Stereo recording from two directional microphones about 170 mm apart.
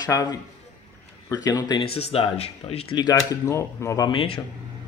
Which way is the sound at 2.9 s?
20° left (ahead or behind).